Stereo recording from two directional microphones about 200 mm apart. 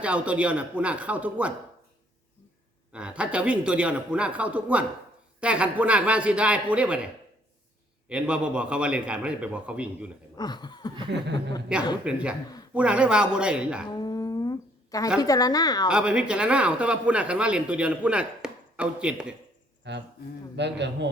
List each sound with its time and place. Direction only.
0.0 s a man's voice: 5° right (ahead or behind)
2.9 s a man's voice: 5° right (ahead or behind)
10.3 s a woman's voice: 20° left (ahead or behind)
11.1 s a man's voice: 60° right (ahead or behind)
11.7 s speech: 5° right (ahead or behind)
13.9 s a sound: 20° left (ahead or behind)
15.2 s a woman's voice: 20° left (ahead or behind)
15.9 s speech: 5° right (ahead or behind)
19.9 s a man's voice: 60° right (ahead or behind)